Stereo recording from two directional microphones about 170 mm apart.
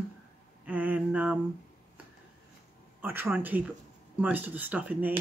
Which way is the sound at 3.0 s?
10° right (ahead or behind).